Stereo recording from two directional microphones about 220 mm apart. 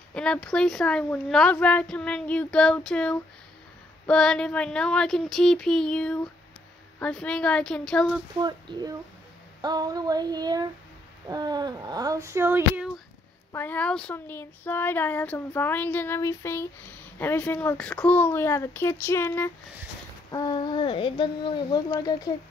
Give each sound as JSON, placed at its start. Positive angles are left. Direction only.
{"t": 0.1, "sound": "speech", "side_deg": 5}
{"t": 8.4, "sound": "speech", "side_deg": -20}
{"t": 13.5, "sound": "speech", "side_deg": 10}